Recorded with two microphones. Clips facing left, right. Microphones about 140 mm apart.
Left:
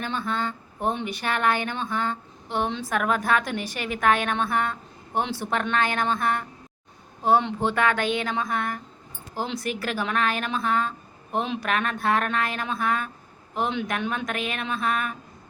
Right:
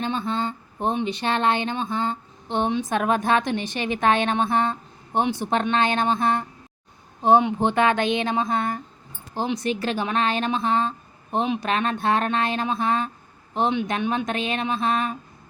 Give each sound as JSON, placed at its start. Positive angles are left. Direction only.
{"t": 0.0, "sound": "speech", "side_deg": -25}